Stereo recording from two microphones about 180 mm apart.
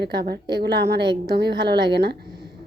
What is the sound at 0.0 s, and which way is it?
A woman's voice, 65° right (ahead or behind).